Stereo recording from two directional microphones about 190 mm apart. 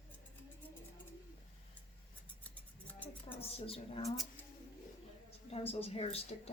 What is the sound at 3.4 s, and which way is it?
Speech, 30° left (ahead or behind).